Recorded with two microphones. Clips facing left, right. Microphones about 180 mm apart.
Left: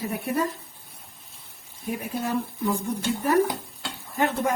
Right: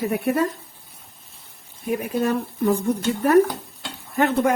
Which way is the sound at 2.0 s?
65° right (ahead or behind).